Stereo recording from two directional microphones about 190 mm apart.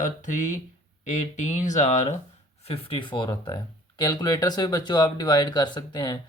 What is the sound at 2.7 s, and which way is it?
Speech, 25° left (ahead or behind).